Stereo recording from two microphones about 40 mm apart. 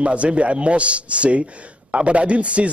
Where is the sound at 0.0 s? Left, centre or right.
Right.